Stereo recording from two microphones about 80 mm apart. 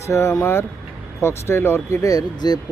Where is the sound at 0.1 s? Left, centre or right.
Left.